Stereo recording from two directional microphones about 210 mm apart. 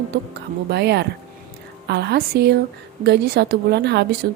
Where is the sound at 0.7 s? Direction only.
50° right (ahead or behind).